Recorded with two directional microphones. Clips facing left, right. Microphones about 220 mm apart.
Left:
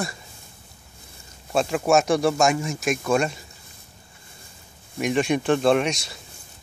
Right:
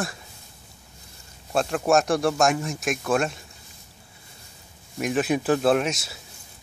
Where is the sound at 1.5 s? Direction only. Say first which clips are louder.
Left 1 dB; centre (ahead or behind).